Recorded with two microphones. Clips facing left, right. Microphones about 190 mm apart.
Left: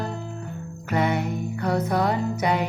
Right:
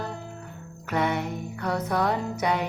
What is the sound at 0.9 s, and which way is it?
Music, 5° left (ahead or behind).